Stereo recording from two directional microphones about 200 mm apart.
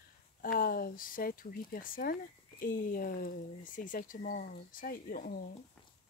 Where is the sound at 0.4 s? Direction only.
45° left (ahead or behind).